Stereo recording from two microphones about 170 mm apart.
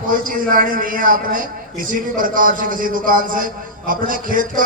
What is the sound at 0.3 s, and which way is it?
A man's voice, 55° right (ahead or behind).